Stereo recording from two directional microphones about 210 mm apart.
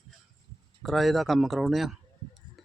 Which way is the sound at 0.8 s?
Centre (ahead or behind).